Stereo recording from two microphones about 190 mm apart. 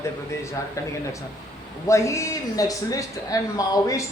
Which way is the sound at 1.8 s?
15° left (ahead or behind).